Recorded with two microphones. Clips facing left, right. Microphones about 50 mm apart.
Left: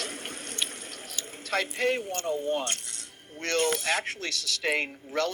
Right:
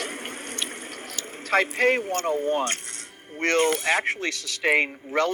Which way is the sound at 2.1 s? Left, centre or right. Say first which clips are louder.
Right 5 dB; right.